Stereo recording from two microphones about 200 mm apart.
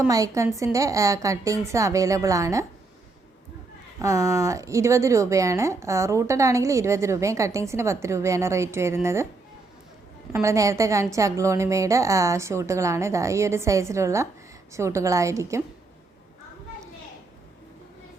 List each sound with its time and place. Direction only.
0.0 s speech: 15° right (ahead or behind)
4.0 s speech: 15° right (ahead or behind)
10.3 s speech: 15° right (ahead or behind)